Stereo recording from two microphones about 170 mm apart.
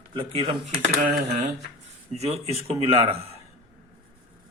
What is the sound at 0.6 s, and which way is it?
Speech, 60° right (ahead or behind).